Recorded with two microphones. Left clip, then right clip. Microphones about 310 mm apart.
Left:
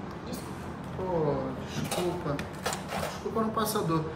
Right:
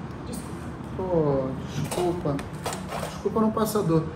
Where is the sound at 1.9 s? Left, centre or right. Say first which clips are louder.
Right 5 dB; right.